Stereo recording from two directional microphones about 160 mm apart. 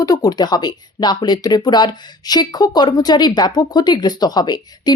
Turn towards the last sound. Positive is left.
turn(degrees=25)  # may be behind; listen again after turning